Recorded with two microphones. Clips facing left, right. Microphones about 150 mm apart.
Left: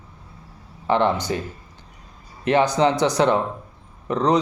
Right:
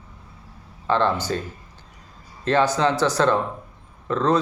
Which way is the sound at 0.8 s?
15° left (ahead or behind).